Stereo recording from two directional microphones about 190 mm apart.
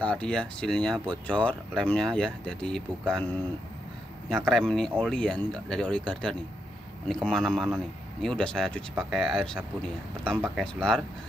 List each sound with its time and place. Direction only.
0.0 s speech: 5° left (ahead or behind)